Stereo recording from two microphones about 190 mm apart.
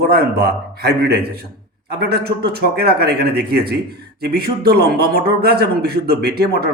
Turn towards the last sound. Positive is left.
turn(degrees=-55)  # may be behind; listen again after turning